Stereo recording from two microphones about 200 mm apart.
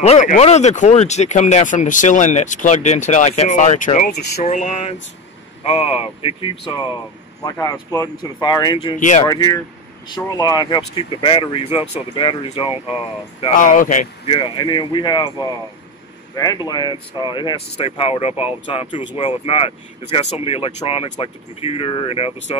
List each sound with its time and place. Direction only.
0.0 s speech: 35° left (ahead or behind)
4.4 s speech: 35° left (ahead or behind)